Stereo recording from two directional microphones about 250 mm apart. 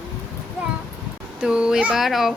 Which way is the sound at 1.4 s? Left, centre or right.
Centre.